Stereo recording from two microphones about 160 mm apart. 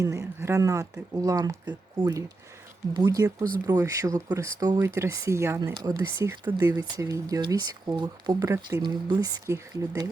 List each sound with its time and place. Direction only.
0.0 s speech: 20° right (ahead or behind)